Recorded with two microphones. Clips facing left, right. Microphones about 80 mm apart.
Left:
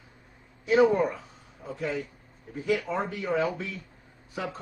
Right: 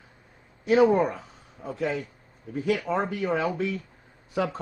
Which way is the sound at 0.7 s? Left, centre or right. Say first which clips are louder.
Right 2 dB; right.